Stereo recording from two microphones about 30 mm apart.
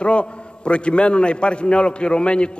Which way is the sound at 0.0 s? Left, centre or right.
Left.